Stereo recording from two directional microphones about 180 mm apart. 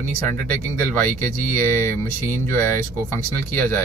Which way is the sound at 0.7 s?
10° left (ahead or behind).